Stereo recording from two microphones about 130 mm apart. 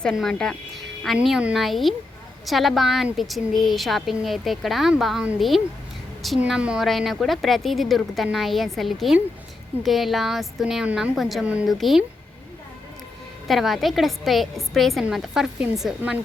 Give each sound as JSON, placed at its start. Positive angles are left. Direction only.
{"t": 0.0, "sound": "a woman's voice", "side_deg": 0}
{"t": 13.5, "sound": "a woman's voice", "side_deg": 0}